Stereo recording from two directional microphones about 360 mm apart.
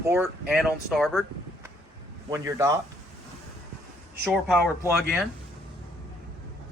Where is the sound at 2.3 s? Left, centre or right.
Centre.